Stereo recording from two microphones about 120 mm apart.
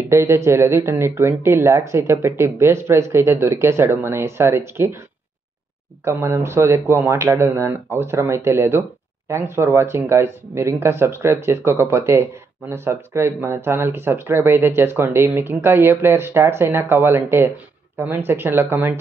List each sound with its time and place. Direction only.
0.1 s speech: 20° right (ahead or behind)
6.0 s speech: 20° right (ahead or behind)